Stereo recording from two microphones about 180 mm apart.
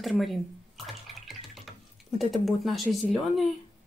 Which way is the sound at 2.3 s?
Centre (ahead or behind).